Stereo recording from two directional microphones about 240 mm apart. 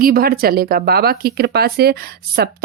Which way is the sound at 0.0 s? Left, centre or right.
Right.